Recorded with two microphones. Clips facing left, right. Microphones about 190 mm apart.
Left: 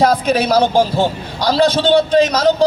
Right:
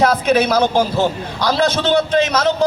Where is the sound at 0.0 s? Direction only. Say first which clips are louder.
Even; 35° left (ahead or behind).